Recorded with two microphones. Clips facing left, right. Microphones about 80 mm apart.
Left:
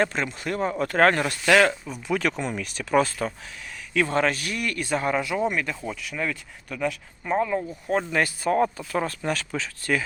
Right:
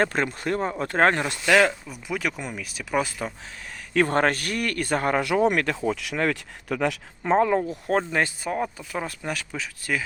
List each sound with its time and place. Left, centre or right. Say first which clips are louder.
0.0 s speech: right 1 dB; right
0.4 s speech: even; right
1.5 s speech: even; centre
3.9 s speech: right 2 dB; right
5.5 s speech: right 5 dB; right
7.9 s speech: right 1 dB; right
8.5 s speech: left 5 dB; centre